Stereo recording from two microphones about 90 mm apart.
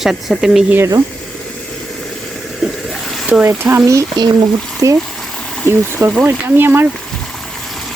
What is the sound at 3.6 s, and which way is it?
Speech, 35° right (ahead or behind).